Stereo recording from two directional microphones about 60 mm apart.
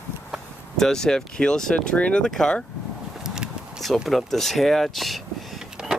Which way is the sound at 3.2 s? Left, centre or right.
Centre.